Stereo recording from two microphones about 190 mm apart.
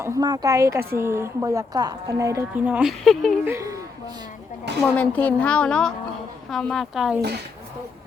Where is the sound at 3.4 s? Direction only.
15° right (ahead or behind).